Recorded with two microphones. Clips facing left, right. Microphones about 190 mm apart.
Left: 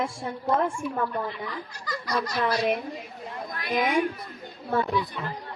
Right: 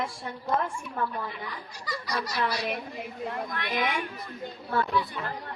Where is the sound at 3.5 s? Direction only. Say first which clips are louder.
Left 8 dB; 40° left (ahead or behind).